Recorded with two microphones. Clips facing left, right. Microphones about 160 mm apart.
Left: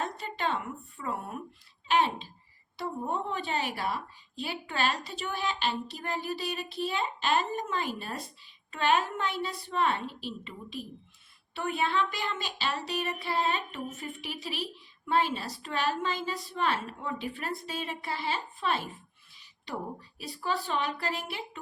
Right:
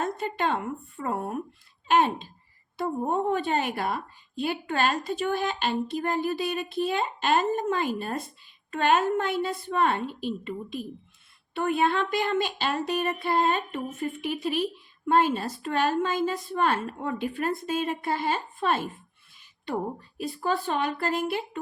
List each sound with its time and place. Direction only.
0.0 s a woman's voice: 50° right (ahead or behind)
1.9 s a sound: 50° right (ahead or behind)
2.7 s a woman's voice: 50° right (ahead or behind)